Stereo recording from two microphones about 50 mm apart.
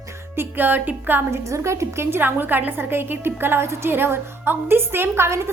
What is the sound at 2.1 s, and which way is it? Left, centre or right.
A woman's voice, right.